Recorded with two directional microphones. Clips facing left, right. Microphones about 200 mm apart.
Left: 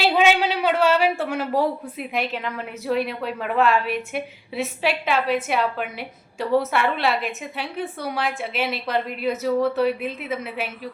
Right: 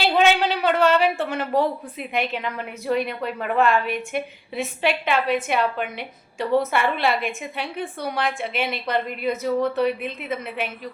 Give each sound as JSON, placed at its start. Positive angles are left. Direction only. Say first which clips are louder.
{"t": 0.0, "sound": "a woman's voice", "louder": "even", "side_deg": 10}